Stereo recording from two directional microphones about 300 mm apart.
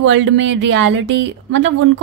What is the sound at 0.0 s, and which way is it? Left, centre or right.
Speech, right.